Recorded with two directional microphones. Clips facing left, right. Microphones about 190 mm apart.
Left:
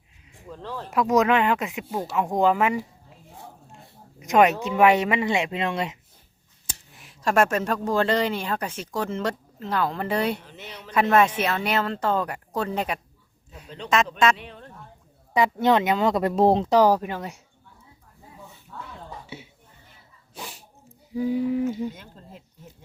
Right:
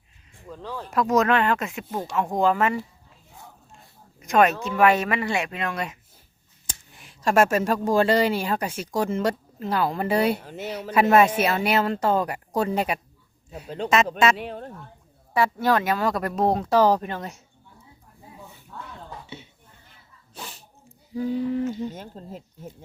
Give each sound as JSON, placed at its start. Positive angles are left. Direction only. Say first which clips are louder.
{"t": 0.4, "sound": "speech", "louder": "even", "side_deg": 0}
{"t": 1.1, "sound": "speech", "louder": "left 1 dB", "side_deg": 15}
{"t": 4.2, "sound": "speech", "louder": "left 1 dB", "side_deg": 15}
{"t": 6.7, "sound": "speech", "louder": "even", "side_deg": 0}
{"t": 10.4, "sound": "speech", "louder": "right 9 dB", "side_deg": -45}
{"t": 11.3, "sound": "speech", "louder": "right 3 dB", "side_deg": -10}
{"t": 13.7, "sound": "speech", "louder": "right 2 dB", "side_deg": -45}
{"t": 15.3, "sound": "speech", "louder": "left 2 dB", "side_deg": 20}
{"t": 19.3, "sound": "a sound", "louder": "left 1 dB", "side_deg": 10}
{"t": 20.3, "sound": "sneeze", "louder": "left 1 dB", "side_deg": 10}
{"t": 21.2, "sound": "speech", "louder": "left 1 dB", "side_deg": 10}
{"t": 21.9, "sound": "speech", "louder": "right 7 dB", "side_deg": -40}